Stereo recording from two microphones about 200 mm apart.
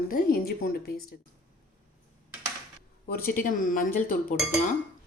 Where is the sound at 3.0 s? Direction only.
50° left (ahead or behind).